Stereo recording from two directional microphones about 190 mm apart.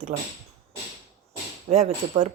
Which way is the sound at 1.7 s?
35° right (ahead or behind).